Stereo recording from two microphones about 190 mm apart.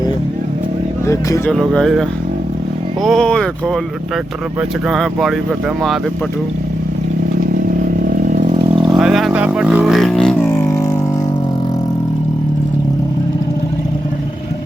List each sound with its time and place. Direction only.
1.0 s speech: 15° left (ahead or behind)
1.5 s speech: 5° left (ahead or behind)
4.9 s speech: centre (ahead or behind)
8.2 s vehicle: 40° right (ahead or behind)
9.0 s a sound: centre (ahead or behind)